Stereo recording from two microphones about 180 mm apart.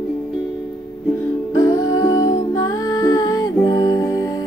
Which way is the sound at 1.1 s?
20° left (ahead or behind).